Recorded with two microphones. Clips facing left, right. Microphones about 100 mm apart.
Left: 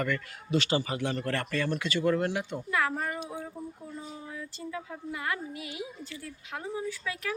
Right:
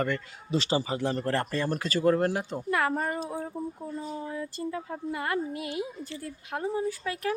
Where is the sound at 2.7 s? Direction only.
50° right (ahead or behind).